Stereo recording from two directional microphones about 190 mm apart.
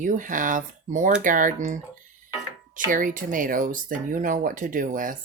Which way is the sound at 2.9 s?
45° right (ahead or behind).